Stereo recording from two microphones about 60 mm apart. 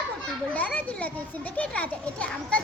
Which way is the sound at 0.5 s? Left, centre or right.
Left.